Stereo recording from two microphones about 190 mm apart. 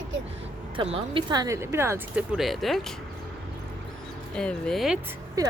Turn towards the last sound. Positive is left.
turn(degrees=-5)  # may be behind; listen again after turning